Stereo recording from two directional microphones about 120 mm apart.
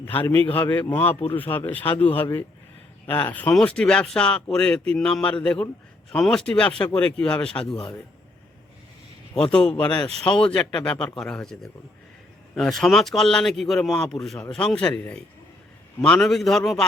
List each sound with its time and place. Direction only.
0.0 s speech: 15° left (ahead or behind)
3.2 s speech: 15° left (ahead or behind)
9.3 s speech: 10° left (ahead or behind)